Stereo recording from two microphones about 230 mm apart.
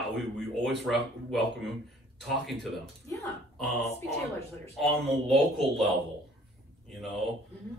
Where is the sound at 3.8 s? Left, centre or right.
Left.